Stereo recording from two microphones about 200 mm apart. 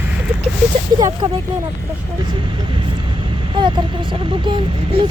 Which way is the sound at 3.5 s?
20° right (ahead or behind).